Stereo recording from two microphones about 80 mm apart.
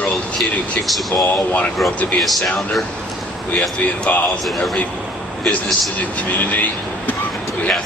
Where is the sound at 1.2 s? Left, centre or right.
Centre.